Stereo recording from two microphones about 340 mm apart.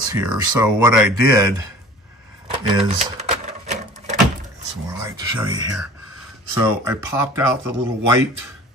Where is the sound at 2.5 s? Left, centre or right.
Centre.